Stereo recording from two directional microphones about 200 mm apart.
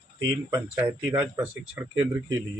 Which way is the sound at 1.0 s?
5° right (ahead or behind).